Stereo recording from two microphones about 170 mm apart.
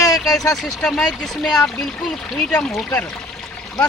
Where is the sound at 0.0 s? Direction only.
20° left (ahead or behind).